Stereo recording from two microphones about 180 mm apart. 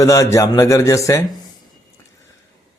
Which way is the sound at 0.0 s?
20° left (ahead or behind).